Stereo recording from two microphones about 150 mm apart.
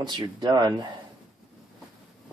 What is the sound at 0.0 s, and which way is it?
Speech, 30° right (ahead or behind).